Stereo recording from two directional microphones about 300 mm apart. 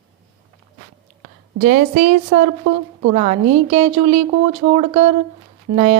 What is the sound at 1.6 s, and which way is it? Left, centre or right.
A woman's voice, right.